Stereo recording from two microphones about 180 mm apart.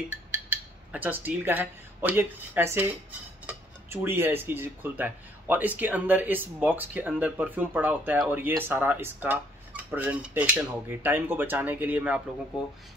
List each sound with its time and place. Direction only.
0.5 s speech: 10° right (ahead or behind)